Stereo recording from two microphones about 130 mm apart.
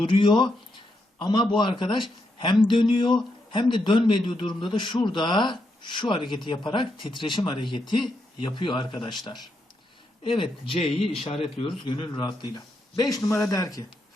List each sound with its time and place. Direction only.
0.0 s speech: 40° left (ahead or behind)